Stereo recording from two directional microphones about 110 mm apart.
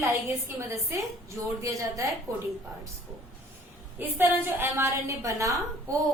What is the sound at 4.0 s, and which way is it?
A woman's voice, 20° right (ahead or behind).